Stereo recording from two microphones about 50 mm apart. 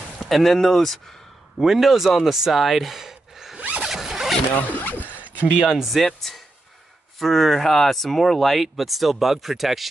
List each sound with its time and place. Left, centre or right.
0.2 s speech: centre
2.0 s speech: centre
2.3 s speech: centre
3.8 s zipper: centre
4.6 s speech: left
5.2 s a sound: right
5.6 s speech: centre
5.9 s speech: centre